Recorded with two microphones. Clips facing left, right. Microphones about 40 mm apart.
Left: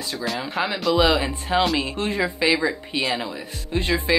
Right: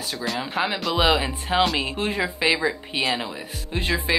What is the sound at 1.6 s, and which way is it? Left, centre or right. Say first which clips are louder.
Speech: even; centre.